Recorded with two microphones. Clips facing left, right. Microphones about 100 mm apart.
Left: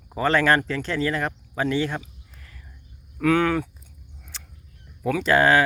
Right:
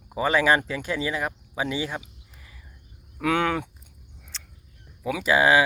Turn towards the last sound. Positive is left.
turn(degrees=-5)  # may be behind; listen again after turning